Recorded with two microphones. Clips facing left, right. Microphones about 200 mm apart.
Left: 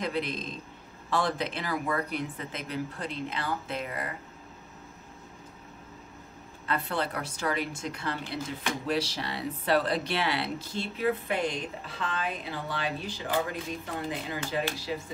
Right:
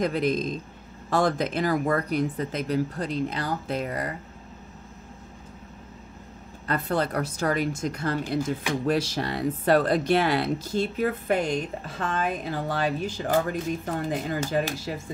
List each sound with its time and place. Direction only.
0.0 s speech: 45° right (ahead or behind)
6.7 s speech: 45° right (ahead or behind)